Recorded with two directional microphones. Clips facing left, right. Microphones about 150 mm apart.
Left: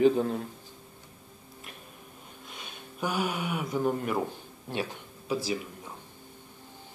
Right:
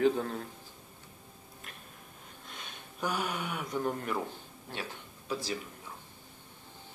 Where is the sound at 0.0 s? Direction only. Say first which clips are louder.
Left 5 dB; 10° left (ahead or behind).